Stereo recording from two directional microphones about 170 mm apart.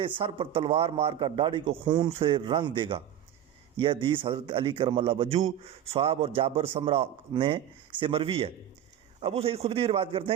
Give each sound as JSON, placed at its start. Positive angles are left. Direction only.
{"t": 0.2, "sound": "a man's voice", "side_deg": -30}